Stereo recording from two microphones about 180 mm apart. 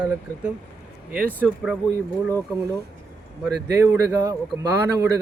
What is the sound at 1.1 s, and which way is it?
Speech, 10° right (ahead or behind).